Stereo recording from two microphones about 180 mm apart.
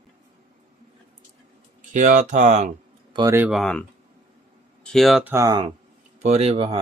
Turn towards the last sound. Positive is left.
turn(degrees=-35)  # may be behind; listen again after turning